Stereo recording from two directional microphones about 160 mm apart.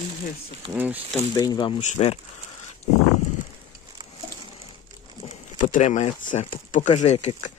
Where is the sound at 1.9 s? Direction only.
40° left (ahead or behind).